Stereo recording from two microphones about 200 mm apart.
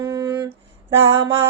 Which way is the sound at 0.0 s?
20° right (ahead or behind).